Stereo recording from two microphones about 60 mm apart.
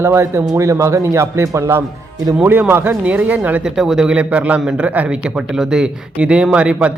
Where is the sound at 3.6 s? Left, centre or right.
Centre.